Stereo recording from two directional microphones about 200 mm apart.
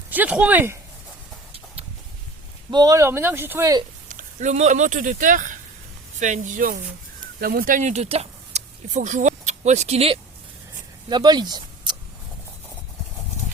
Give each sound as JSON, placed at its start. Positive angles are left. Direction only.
{"t": 0.1, "sound": "speech", "side_deg": -10}
{"t": 2.6, "sound": "speech", "side_deg": -20}
{"t": 4.1, "sound": "speech", "side_deg": -40}
{"t": 11.1, "sound": "speech", "side_deg": -20}